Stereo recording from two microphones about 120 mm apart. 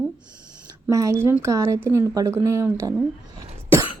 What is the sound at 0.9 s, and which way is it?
Speech, 25° right (ahead or behind).